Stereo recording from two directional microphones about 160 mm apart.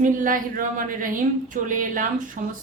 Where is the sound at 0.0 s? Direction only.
55° right (ahead or behind).